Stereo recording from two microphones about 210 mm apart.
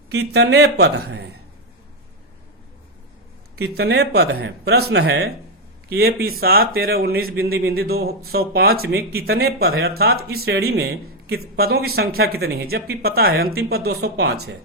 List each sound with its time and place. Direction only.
0.1 s speech: 50° right (ahead or behind)
3.6 s speech: 50° right (ahead or behind)